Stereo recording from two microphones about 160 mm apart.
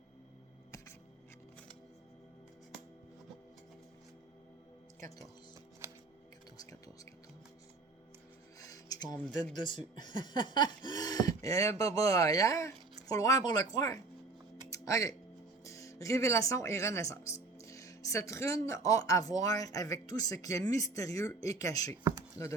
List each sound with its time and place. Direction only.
4.9 s speech: 20° left (ahead or behind)
5.8 s music: 15° right (ahead or behind)
6.6 s music: 20° left (ahead or behind)
8.6 s a sound: 20° left (ahead or behind)
9.6 s speech: 30° left (ahead or behind)
10.0 s a sound: 25° left (ahead or behind)
11.4 s speech: 20° left (ahead or behind)
14.7 s music: 20° left (ahead or behind)
15.6 s speech: 20° left (ahead or behind)